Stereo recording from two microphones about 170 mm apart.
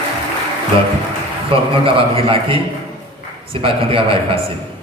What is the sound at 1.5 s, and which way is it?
A man's voice, 30° right (ahead or behind).